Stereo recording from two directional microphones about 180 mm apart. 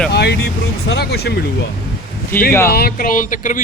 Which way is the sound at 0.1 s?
65° left (ahead or behind).